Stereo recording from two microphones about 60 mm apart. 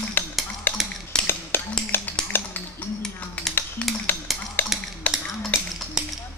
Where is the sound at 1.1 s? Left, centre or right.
Centre.